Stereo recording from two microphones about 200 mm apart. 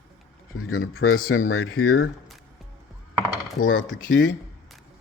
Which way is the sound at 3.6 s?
75° left (ahead or behind).